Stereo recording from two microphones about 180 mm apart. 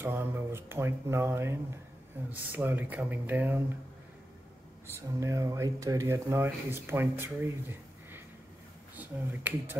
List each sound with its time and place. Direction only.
0.0 s speech: 10° right (ahead or behind)
4.9 s speech: 15° right (ahead or behind)
8.9 s speech: 10° right (ahead or behind)